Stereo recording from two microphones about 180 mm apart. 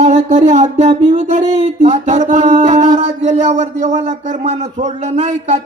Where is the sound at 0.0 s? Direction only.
40° right (ahead or behind).